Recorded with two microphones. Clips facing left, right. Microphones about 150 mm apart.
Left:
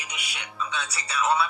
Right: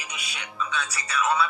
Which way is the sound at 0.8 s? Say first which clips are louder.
Even; 30° left (ahead or behind).